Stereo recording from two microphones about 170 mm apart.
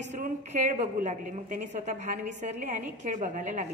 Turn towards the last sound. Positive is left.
turn(degrees=-45)  # may be behind; listen again after turning